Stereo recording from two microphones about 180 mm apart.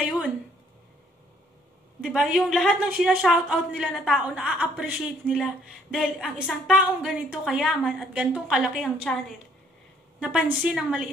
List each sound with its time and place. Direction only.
2.0 s a woman's voice: centre (ahead or behind)
10.2 s a woman's voice: 5° right (ahead or behind)